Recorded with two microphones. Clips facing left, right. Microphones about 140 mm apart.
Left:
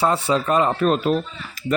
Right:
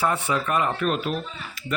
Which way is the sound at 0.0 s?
30° left (ahead or behind).